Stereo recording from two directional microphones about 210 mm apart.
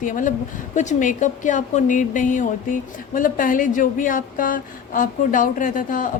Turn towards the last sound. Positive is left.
turn(degrees=40)  # may be behind; listen again after turning